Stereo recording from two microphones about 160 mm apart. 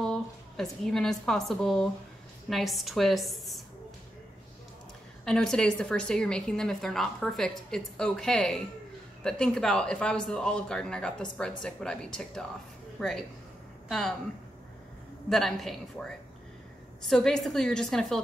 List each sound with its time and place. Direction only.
0.0 s a woman's voice: 5° left (ahead or behind)
5.2 s a woman's voice: 5° left (ahead or behind)
15.2 s a woman's voice: centre (ahead or behind)
17.1 s a woman's voice: 5° left (ahead or behind)